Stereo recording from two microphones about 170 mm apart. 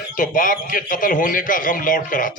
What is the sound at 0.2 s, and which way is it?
Speech, 55° left (ahead or behind).